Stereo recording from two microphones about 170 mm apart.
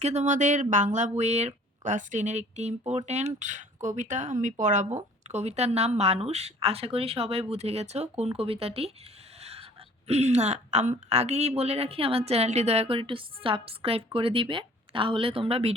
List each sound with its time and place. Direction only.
0.0 s speech: 40° right (ahead or behind)
9.4 s a sound: 35° right (ahead or behind)
10.1 s speech: 40° right (ahead or behind)